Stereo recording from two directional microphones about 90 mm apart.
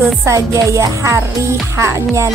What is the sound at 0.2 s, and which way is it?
A woman's voice, 35° right (ahead or behind).